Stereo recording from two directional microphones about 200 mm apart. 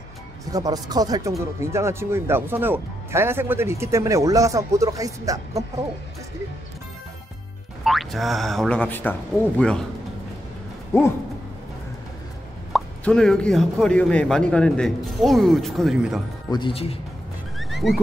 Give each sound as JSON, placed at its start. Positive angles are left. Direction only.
{"t": 0.5, "sound": "speech", "side_deg": -20}
{"t": 7.8, "sound": "speech", "side_deg": 0}
{"t": 10.9, "sound": "a sound", "side_deg": 15}
{"t": 12.7, "sound": "speech", "side_deg": 5}
{"t": 16.4, "sound": "speech", "side_deg": 25}
{"t": 17.6, "sound": "neigh", "side_deg": 0}